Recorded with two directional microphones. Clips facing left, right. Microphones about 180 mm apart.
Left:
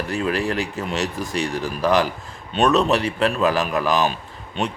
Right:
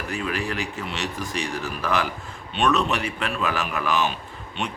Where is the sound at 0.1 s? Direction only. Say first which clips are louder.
Left 4 dB; 35° left (ahead or behind).